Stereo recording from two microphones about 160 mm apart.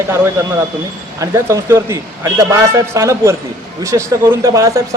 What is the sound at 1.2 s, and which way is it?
A man's voice, 20° right (ahead or behind).